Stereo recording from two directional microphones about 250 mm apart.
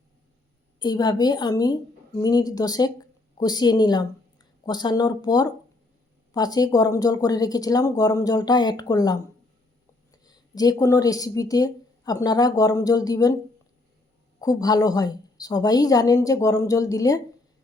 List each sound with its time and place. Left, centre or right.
0.8 s speech: centre
14.4 s speech: centre